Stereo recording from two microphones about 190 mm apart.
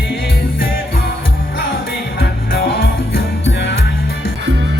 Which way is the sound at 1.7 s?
50° left (ahead or behind).